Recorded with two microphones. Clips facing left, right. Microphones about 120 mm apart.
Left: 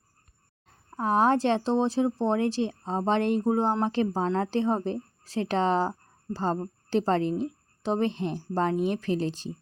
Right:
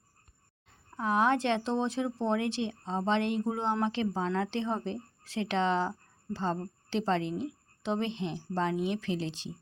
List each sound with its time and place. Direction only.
0.9 s speech: 40° left (ahead or behind)